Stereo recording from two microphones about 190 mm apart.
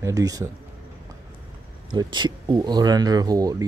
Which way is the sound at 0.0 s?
20° right (ahead or behind).